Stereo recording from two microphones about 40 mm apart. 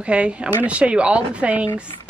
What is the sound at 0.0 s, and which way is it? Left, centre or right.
Speech, right.